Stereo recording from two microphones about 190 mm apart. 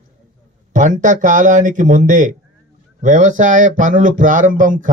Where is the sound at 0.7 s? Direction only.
40° right (ahead or behind).